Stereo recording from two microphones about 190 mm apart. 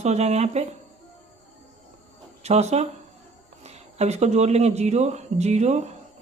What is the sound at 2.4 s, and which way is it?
Speech, 35° right (ahead or behind).